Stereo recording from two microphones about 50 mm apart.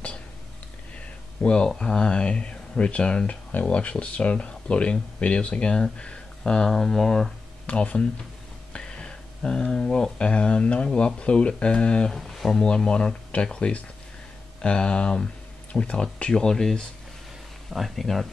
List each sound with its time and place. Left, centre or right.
0.9 s speech: centre
6.7 s speech: centre
7.6 s speech: left
8.7 s a sound: centre
10.2 s speech: left
12.1 s speech: centre